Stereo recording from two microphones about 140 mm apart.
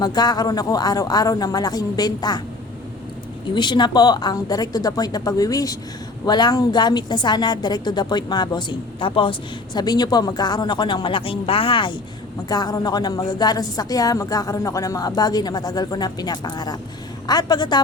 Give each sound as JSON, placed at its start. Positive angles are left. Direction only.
{"t": 0.0, "sound": "a woman's voice", "side_deg": 30}
{"t": 3.5, "sound": "a woman's voice", "side_deg": 30}